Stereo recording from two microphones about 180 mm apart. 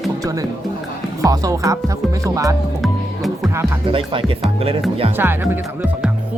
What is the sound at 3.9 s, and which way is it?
Speech, 30° right (ahead or behind).